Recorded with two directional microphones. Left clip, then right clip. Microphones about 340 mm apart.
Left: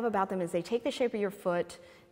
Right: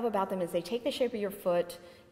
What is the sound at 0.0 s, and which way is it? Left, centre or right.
A woman's voice, left.